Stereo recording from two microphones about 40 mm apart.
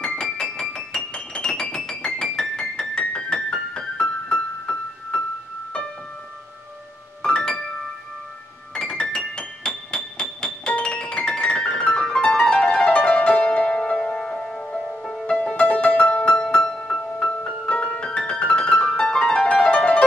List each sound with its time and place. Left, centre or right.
0.0 s music: centre
2.0 s piano: centre
2.8 s music: centre
7.2 s music: centre
8.7 s music: centre
13.9 s music: centre
15.5 s music: left
16.1 s music: left
16.3 s music: centre
17.3 s music: left